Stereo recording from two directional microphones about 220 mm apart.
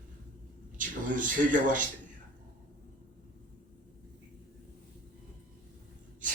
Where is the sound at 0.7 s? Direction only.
35° right (ahead or behind).